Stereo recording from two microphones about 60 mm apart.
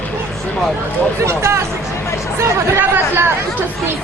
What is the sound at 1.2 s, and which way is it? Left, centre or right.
Speech, right.